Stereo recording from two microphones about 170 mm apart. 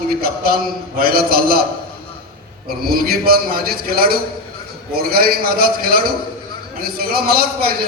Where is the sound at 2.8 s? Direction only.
60° right (ahead or behind).